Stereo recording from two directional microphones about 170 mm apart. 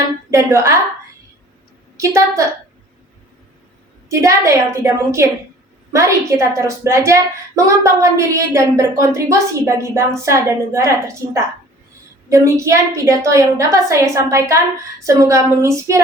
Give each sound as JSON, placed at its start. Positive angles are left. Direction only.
{"t": 0.3, "sound": "a woman's voice", "side_deg": -20}
{"t": 2.0, "sound": "a woman's voice", "side_deg": -15}
{"t": 4.1, "sound": "a woman's voice", "side_deg": -15}